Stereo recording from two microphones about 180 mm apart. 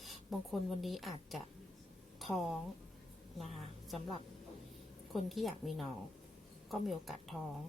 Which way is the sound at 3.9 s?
Centre (ahead or behind).